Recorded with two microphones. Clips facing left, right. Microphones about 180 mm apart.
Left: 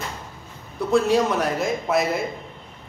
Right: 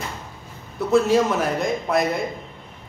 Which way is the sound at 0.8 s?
Centre (ahead or behind).